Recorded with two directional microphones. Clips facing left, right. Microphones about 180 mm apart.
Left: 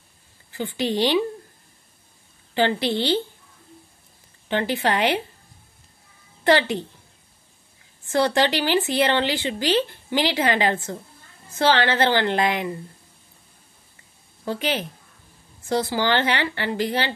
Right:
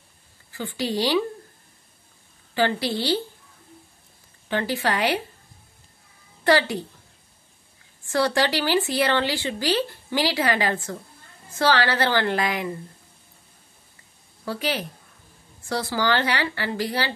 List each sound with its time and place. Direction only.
0.5 s speech: 20° left (ahead or behind)
2.5 s speech: 20° left (ahead or behind)
4.5 s speech: 20° left (ahead or behind)
6.4 s speech: 20° left (ahead or behind)
8.1 s speech: 20° left (ahead or behind)
14.4 s speech: 20° left (ahead or behind)